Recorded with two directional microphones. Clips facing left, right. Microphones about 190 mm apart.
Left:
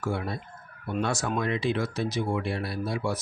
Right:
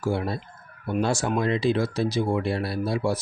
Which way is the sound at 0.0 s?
30° right (ahead or behind).